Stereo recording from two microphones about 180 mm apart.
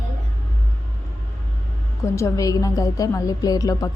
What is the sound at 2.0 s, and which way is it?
A woman's voice, 15° left (ahead or behind).